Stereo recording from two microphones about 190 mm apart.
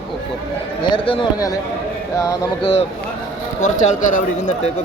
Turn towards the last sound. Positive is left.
turn(degrees=40)  # may be behind; listen again after turning